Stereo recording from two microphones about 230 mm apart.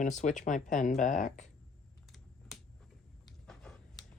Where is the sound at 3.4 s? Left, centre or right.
Centre.